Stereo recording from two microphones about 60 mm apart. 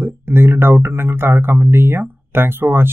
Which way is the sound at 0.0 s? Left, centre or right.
Right.